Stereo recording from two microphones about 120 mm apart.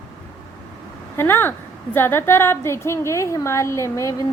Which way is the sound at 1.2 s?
20° left (ahead or behind).